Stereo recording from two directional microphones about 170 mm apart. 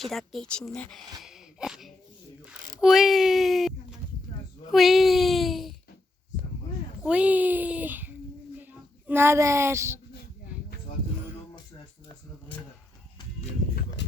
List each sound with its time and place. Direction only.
0.0 s speech: centre (ahead or behind)
1.2 s a sound: 5° right (ahead or behind)
2.8 s a child's voice: centre (ahead or behind)
7.0 s a child's voice: 10° right (ahead or behind)